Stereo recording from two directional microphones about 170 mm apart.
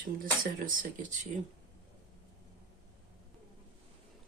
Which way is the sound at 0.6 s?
50° right (ahead or behind).